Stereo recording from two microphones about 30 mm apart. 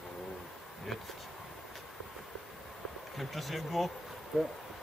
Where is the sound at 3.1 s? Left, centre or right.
Centre.